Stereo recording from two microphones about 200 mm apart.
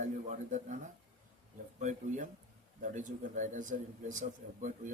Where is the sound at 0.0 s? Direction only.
40° right (ahead or behind).